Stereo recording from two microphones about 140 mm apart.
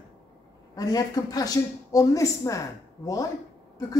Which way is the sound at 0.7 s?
25° left (ahead or behind).